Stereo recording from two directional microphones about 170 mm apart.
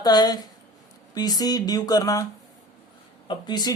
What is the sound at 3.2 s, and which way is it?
Speech, 25° left (ahead or behind).